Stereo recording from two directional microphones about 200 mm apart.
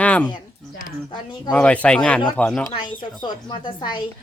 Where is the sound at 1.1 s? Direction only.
20° left (ahead or behind).